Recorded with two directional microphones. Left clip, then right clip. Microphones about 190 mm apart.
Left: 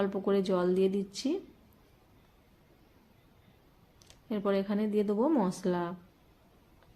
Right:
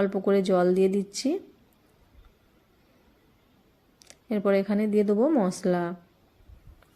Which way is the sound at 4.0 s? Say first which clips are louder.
Right 6 dB; 25° right (ahead or behind).